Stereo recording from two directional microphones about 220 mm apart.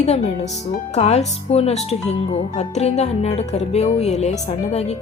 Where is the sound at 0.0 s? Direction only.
30° left (ahead or behind).